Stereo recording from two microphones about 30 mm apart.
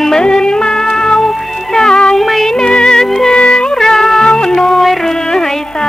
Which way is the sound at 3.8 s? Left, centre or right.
Centre.